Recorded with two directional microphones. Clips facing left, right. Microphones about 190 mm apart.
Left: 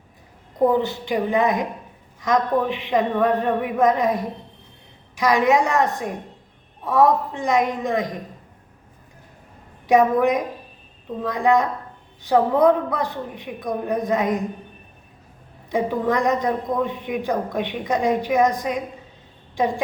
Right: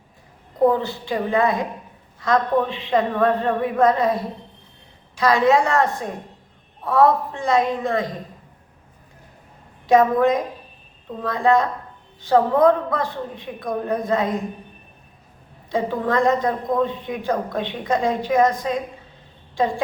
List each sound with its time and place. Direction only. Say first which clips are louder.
0.7 s a man's voice: left 1 dB; 20° left (ahead or behind)
9.8 s a man's voice: right 1 dB; 15° left (ahead or behind)
15.7 s a man's voice: even; 15° left (ahead or behind)